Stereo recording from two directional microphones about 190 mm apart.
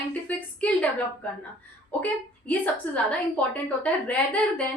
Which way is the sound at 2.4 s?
10° left (ahead or behind).